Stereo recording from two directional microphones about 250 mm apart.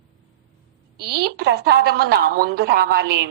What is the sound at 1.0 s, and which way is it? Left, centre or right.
A woman's voice, right.